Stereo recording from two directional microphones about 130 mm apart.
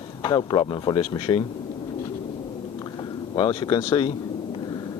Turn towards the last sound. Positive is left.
turn(degrees=35)  # may be behind; listen again after turning